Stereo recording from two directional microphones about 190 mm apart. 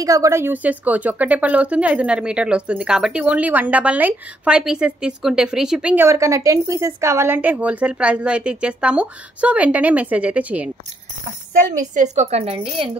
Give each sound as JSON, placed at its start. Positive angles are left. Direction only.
{"t": 0.0, "sound": "a woman's voice", "side_deg": -15}
{"t": 11.5, "sound": "a woman's voice", "side_deg": -40}